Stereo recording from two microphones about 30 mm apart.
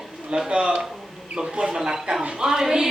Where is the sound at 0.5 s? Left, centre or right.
Right.